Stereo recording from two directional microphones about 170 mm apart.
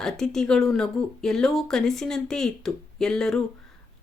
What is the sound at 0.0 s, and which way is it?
Speech, 5° left (ahead or behind).